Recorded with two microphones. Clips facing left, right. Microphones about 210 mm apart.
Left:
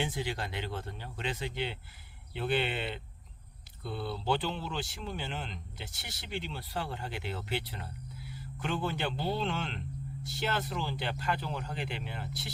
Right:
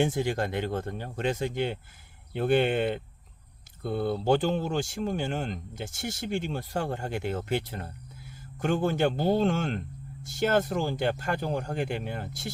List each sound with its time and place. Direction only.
0.0 s speech: 50° right (ahead or behind)